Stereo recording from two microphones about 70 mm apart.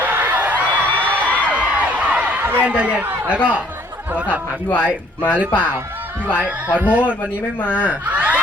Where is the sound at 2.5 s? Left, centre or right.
Right.